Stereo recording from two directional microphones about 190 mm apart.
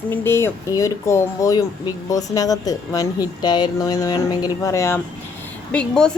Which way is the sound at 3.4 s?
20° left (ahead or behind).